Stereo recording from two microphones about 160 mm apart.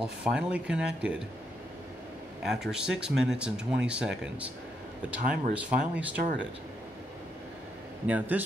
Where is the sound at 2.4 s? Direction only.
5° right (ahead or behind).